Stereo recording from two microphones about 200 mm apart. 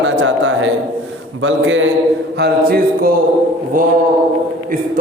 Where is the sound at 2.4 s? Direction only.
50° right (ahead or behind).